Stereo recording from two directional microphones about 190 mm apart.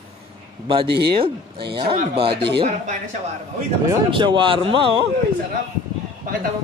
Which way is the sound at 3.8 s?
25° right (ahead or behind).